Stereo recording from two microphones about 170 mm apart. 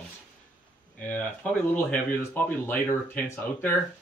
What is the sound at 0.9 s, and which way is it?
Speech, 10° left (ahead or behind).